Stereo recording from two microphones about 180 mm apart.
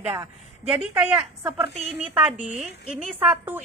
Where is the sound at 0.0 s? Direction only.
10° right (ahead or behind).